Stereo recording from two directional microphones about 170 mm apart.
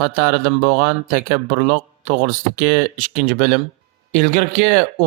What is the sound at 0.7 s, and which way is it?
Speech, 55° right (ahead or behind).